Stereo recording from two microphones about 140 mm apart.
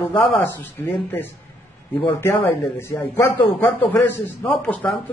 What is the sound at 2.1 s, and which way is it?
A man's voice, 15° left (ahead or behind).